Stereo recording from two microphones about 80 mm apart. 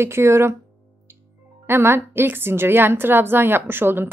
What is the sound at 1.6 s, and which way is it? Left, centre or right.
A woman's voice, right.